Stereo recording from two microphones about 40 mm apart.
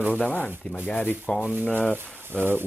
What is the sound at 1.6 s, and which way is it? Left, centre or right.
Speech, right.